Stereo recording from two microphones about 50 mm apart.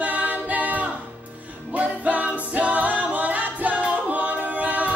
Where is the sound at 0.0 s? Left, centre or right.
Right.